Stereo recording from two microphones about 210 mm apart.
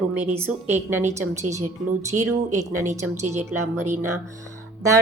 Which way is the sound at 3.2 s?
35° right (ahead or behind).